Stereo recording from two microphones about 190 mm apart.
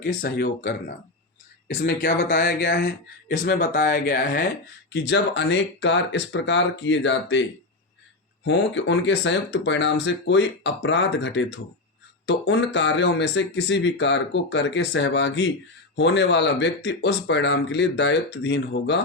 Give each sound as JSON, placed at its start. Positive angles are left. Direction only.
{"t": 0.0, "sound": "speech", "side_deg": 50}
{"t": 4.9, "sound": "speech", "side_deg": 65}
{"t": 8.4, "sound": "speech", "side_deg": 70}